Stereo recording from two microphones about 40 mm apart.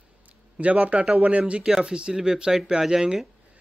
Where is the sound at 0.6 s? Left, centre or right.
Right.